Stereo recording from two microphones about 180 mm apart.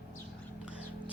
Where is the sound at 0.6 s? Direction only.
5° right (ahead or behind).